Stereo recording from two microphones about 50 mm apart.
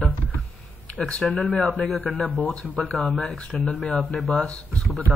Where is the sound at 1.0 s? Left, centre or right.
Left.